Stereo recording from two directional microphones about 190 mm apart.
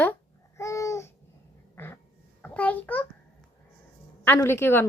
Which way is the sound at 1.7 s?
10° left (ahead or behind).